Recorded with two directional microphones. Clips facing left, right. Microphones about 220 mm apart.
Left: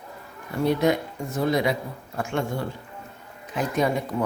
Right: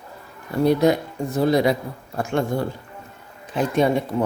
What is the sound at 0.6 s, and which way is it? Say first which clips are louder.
Speech: right 4 dB; 35° right (ahead or behind).